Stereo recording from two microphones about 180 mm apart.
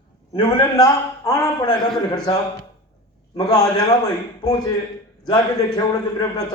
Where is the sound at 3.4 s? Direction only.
20° left (ahead or behind).